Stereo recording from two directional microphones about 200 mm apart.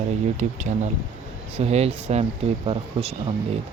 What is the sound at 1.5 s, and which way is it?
Speech, 30° right (ahead or behind).